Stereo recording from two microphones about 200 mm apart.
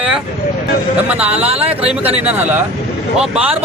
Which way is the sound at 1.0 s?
5° right (ahead or behind).